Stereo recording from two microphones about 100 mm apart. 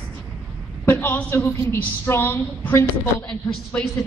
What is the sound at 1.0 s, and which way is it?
A woman's voice, 20° left (ahead or behind).